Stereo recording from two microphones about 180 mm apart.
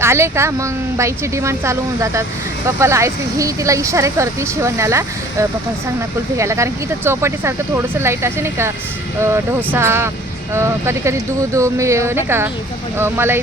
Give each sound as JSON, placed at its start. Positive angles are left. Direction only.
{"t": 0.0, "sound": "speech", "side_deg": -15}